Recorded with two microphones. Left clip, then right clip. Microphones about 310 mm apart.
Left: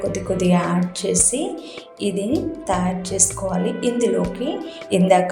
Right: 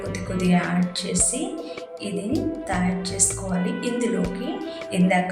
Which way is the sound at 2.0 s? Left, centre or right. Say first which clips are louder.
Left 6 dB; centre.